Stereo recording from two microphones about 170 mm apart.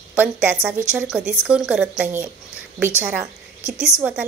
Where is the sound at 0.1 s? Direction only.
10° right (ahead or behind).